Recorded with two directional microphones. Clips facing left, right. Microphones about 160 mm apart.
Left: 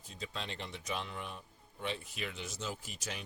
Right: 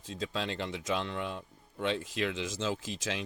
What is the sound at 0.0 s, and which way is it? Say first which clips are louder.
A man's voice: right 8 dB; 90° right.